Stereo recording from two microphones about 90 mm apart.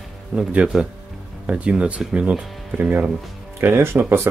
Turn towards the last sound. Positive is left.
turn(degrees=-25)  # may be behind; listen again after turning